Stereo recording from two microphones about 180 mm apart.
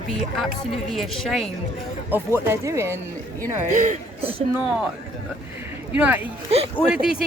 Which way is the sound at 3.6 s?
45° right (ahead or behind).